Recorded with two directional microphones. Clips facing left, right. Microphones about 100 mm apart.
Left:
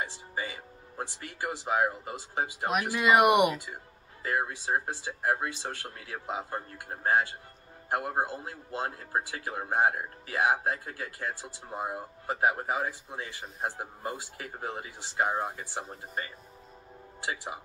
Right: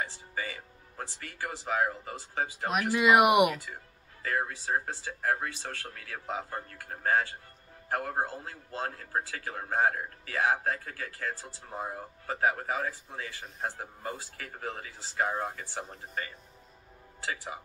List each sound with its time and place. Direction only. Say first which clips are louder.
0.0 s speech: left 1 dB; 20° left (ahead or behind)
2.7 s speech: right 1 dB; centre (ahead or behind)
4.2 s a man's voice: left 1 dB; 20° left (ahead or behind)
17.2 s a man's voice: left 1 dB; 20° left (ahead or behind)